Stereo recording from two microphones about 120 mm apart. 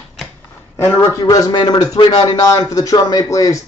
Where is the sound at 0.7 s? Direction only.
20° left (ahead or behind).